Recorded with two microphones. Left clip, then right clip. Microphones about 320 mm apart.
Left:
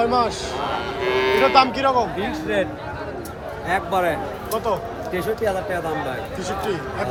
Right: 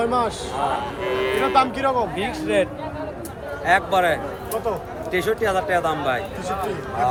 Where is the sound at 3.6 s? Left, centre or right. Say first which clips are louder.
Right 3 dB; centre.